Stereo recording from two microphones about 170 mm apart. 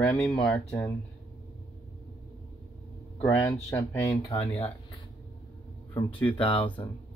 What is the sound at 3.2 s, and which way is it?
Speech, 20° left (ahead or behind).